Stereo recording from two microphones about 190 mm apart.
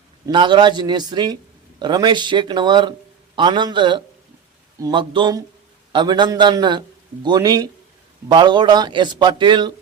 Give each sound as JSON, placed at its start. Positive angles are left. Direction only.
{"t": 0.3, "sound": "a man's voice", "side_deg": -25}